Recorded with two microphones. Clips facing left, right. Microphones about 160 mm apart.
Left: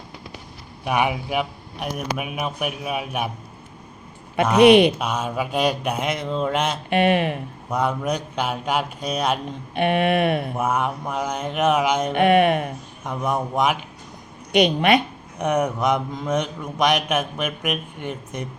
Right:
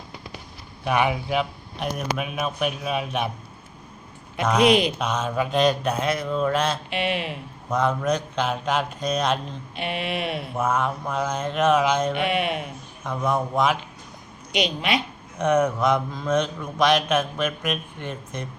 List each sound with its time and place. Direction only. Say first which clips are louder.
0.9 s a man's voice: even; 15° left (ahead or behind)
4.6 s speech: left 7 dB; 65° left (ahead or behind)
4.9 s a man's voice: even; 10° left (ahead or behind)
6.9 s speech: left 8 dB; 50° left (ahead or behind)
7.7 s a man's voice: right 1 dB; 10° left (ahead or behind)
9.7 s speech: left 9 dB; 55° left (ahead or behind)
10.6 s a man's voice: left 1 dB; 15° left (ahead or behind)
12.1 s speech: left 8 dB; 55° left (ahead or behind)
13.1 s a man's voice: even; 15° left (ahead or behind)
14.5 s speech: left 7 dB; 55° left (ahead or behind)
15.4 s a man's voice: right 1 dB; 15° left (ahead or behind)